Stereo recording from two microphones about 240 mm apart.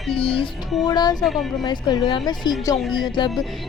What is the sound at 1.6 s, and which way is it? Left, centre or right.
Speech, centre.